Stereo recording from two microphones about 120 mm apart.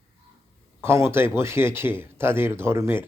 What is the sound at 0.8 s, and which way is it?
Speech, 20° right (ahead or behind).